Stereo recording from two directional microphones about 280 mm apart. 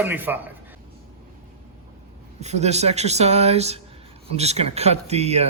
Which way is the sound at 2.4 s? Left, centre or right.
Right.